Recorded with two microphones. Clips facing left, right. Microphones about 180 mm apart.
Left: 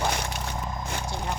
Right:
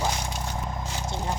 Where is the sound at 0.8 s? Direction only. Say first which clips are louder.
Left 1 dB; 60° left (ahead or behind).